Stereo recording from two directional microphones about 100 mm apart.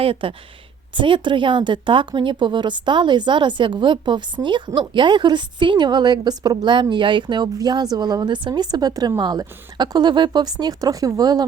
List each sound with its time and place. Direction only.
0.0 s speech: 65° right (ahead or behind); by 11.4 s 40° right (ahead or behind)